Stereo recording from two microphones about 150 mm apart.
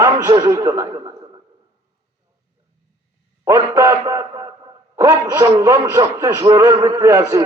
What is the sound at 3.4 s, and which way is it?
A man's voice, 20° right (ahead or behind).